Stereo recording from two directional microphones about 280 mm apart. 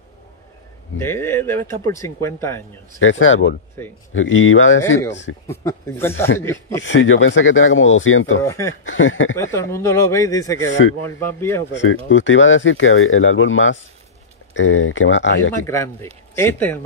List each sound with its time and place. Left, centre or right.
0.9 s speech: centre
3.0 s speech: left
5.5 s speech: centre
6.8 s speech: left
8.4 s speech: centre
8.8 s speech: left
9.4 s speech: centre
10.7 s speech: left
11.2 s speech: centre
11.7 s speech: left
15.6 s speech: centre